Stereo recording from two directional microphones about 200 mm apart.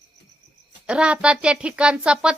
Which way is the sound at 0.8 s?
5° right (ahead or behind).